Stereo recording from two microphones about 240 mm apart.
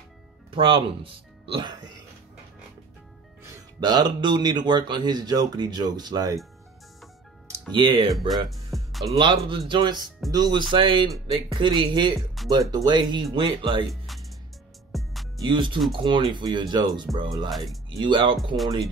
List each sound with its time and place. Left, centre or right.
0.5 s speech: right
3.8 s speech: centre
7.7 s speech: centre
8.5 s music: centre
9.0 s speech: right
14.9 s music: centre
15.3 s speech: centre
17.5 s speech: centre
18.0 s speech: right